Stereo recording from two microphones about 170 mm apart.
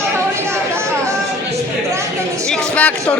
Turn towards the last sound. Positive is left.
turn(degrees=5)  # may be behind; listen again after turning